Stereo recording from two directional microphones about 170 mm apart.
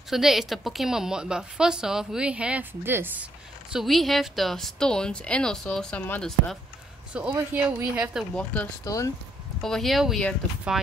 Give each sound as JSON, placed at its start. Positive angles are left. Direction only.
{"t": 0.1, "sound": "a woman's voice", "side_deg": 0}
{"t": 3.7, "sound": "a woman's voice", "side_deg": 0}
{"t": 7.2, "sound": "speech", "side_deg": -10}
{"t": 8.8, "sound": "speech", "side_deg": 20}
{"t": 9.6, "sound": "a woman's voice", "side_deg": 0}